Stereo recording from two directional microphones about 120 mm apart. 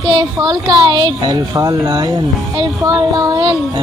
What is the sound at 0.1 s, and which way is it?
Speech, 35° right (ahead or behind).